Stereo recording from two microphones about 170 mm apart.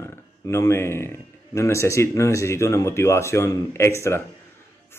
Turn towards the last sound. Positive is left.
turn(degrees=15)  # may be behind; listen again after turning